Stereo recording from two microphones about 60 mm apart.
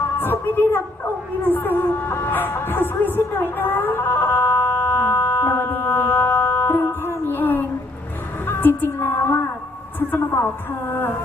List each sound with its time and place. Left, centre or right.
0.2 s speech: left
1.5 s music: left
8.4 s a sound: left
10.1 s a woman's voice: left